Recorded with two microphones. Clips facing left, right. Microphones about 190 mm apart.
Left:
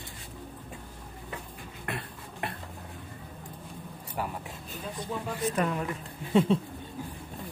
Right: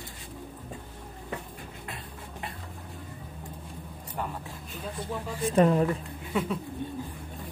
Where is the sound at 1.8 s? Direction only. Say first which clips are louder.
Left 3 dB; 65° left (ahead or behind).